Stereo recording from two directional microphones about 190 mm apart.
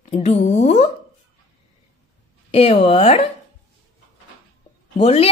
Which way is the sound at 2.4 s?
30° left (ahead or behind).